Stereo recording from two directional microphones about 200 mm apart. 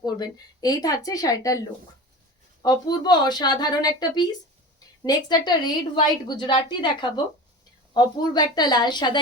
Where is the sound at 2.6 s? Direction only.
20° left (ahead or behind).